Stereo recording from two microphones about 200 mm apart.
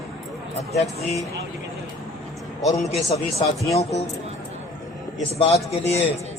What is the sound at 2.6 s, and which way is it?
A man's voice, 15° left (ahead or behind).